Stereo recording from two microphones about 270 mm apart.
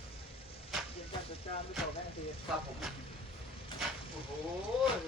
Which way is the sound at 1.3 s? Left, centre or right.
Left.